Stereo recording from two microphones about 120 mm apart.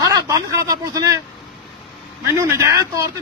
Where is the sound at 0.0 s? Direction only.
25° right (ahead or behind).